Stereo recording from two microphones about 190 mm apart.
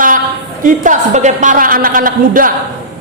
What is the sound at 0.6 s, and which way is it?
A woman's voice, 40° right (ahead or behind).